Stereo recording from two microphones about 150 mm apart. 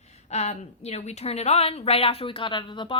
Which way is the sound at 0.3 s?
45° left (ahead or behind).